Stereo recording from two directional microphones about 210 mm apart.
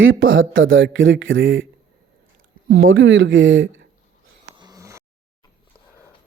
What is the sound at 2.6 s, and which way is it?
Speech, 70° right (ahead or behind).